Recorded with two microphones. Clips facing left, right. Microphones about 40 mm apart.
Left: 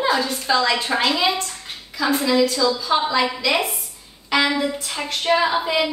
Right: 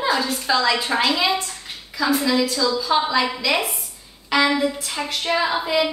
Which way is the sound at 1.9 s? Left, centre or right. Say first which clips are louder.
Left 1 dB; centre.